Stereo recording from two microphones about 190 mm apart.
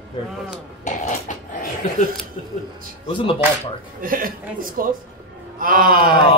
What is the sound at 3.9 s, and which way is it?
A man's voice, 50° right (ahead or behind).